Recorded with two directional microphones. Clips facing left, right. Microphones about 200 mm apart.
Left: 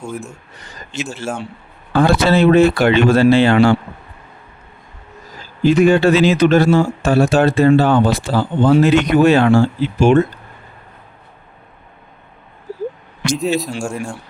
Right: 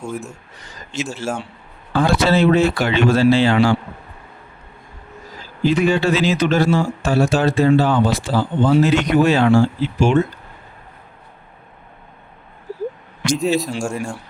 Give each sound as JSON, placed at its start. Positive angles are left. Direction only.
{"t": 0.0, "sound": "speech", "side_deg": 0}
{"t": 1.2, "sound": "speech", "side_deg": 55}
{"t": 5.6, "sound": "speech", "side_deg": 50}
{"t": 13.3, "sound": "speech", "side_deg": 0}